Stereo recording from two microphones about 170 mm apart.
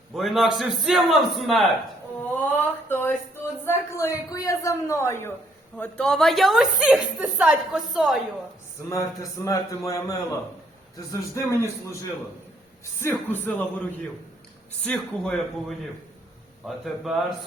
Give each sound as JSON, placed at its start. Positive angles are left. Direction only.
{"t": 0.1, "sound": "a woman's voice", "side_deg": 0}
{"t": 2.3, "sound": "a sound", "side_deg": 10}
{"t": 3.6, "sound": "a man's voice", "side_deg": 15}
{"t": 8.9, "sound": "a man's voice", "side_deg": 20}
{"t": 14.8, "sound": "a woman's voice", "side_deg": 5}
{"t": 16.6, "sound": "a woman's voice", "side_deg": 0}